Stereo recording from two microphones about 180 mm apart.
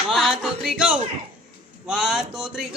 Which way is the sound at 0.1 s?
Centre (ahead or behind).